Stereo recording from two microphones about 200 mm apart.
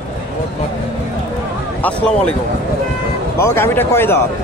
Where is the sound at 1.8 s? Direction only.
5° left (ahead or behind).